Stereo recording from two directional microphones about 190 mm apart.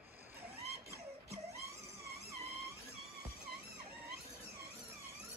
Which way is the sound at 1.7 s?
15° right (ahead or behind).